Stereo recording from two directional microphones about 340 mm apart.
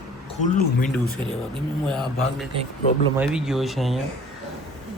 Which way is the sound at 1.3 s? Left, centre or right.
Centre.